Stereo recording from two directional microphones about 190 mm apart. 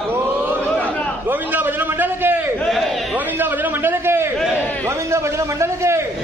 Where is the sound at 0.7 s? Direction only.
5° left (ahead or behind).